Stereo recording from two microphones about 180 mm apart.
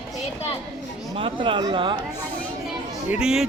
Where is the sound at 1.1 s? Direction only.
30° right (ahead or behind).